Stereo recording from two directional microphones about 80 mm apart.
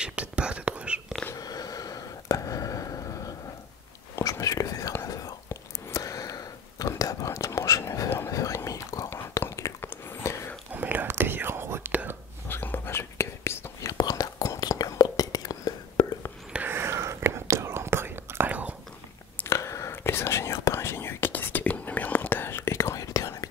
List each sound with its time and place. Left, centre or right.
0.0 s whispering: centre
1.3 s a sound: left
4.1 s whispering: left
5.5 s a sound: left
8.3 s whispering: left
9.4 s a sound: left
9.8 s a sound: left
10.7 s whispering: right
12.4 s whispering: left
13.8 s whispering: left
16.6 s whispering: right
19.4 s whispering: left